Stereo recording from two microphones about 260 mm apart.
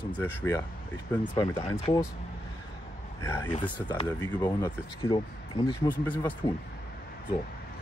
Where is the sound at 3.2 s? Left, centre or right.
Centre.